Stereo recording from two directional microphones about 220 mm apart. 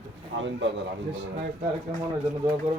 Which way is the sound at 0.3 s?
55° right (ahead or behind).